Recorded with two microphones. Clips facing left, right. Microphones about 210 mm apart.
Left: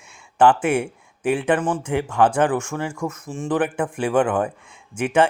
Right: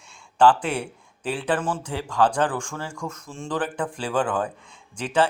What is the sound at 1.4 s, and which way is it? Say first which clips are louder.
Speech: left 5 dB; 15° left (ahead or behind).